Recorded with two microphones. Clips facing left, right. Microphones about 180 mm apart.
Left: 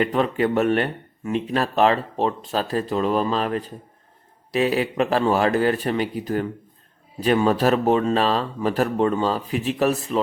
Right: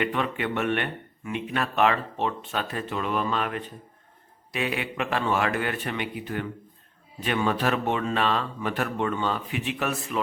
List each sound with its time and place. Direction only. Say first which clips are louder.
0.0 s speech: left 7 dB; 35° left (ahead or behind)